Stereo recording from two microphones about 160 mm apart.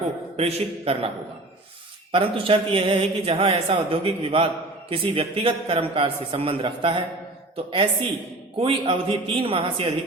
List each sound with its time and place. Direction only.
0.3 s a man's voice: 40° right (ahead or behind)
2.1 s a man's voice: 35° right (ahead or behind)